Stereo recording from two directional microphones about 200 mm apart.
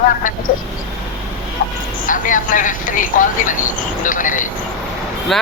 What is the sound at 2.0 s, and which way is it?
Speech, 40° left (ahead or behind).